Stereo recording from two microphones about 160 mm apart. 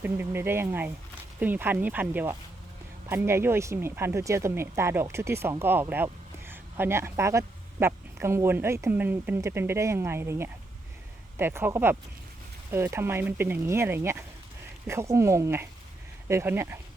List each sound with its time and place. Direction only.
0.0 s speech: 15° right (ahead or behind)